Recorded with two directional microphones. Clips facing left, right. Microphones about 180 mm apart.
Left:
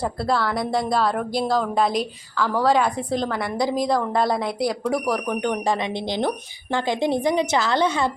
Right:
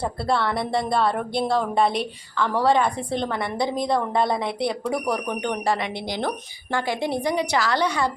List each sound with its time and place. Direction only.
0.3 s speech: 5° left (ahead or behind)
2.4 s speech: 5° left (ahead or behind)
6.7 s a woman's voice: 20° left (ahead or behind)